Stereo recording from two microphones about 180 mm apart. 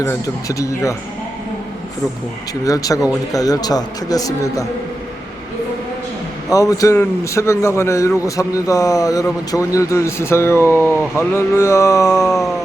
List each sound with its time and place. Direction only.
0.0 s a man's voice: 15° left (ahead or behind)
2.6 s speech: 20° left (ahead or behind)
6.5 s a man's voice: 20° left (ahead or behind)
12.0 s a sound: centre (ahead or behind)